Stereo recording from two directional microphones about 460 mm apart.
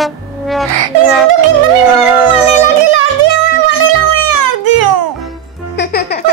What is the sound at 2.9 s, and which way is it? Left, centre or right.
Music, right.